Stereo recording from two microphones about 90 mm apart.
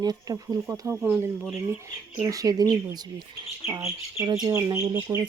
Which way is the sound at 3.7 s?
40° right (ahead or behind).